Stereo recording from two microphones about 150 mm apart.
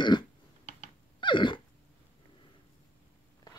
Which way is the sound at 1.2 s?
30° left (ahead or behind).